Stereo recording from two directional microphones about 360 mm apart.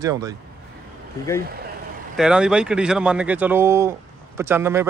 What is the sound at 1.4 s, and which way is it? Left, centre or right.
Speech, right.